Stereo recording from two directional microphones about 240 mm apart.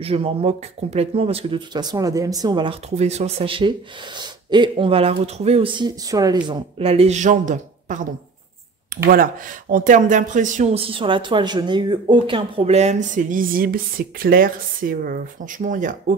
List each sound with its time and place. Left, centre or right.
0.0 s speech: right